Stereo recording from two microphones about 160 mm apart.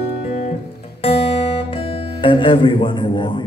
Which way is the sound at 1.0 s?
40° left (ahead or behind).